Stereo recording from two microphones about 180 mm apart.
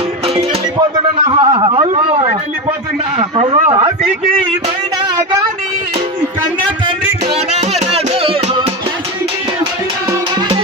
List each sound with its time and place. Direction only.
1.3 s a man's voice: 25° right (ahead or behind)
7.5 s music: 35° right (ahead or behind)